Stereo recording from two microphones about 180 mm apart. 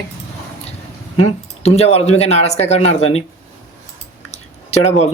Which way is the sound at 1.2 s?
35° left (ahead or behind).